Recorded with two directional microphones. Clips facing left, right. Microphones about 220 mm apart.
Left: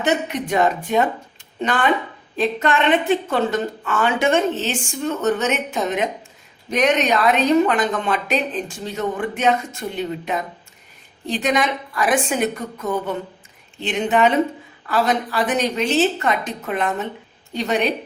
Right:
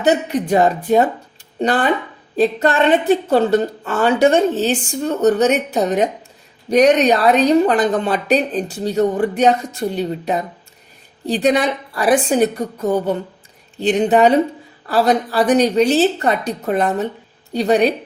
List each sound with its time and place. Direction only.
0.0 s speech: 35° right (ahead or behind)